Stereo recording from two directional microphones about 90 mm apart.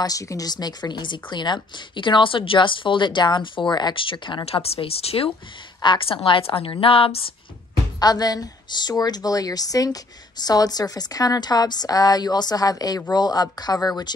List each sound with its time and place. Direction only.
0.0 s speech: 40° left (ahead or behind); by 4.4 s 75° left (ahead or behind)
4.5 s speech: 90° left
5.8 s a woman's voice: 70° left (ahead or behind); by 7.2 s 90° left
8.0 s a woman's voice: 45° left (ahead or behind)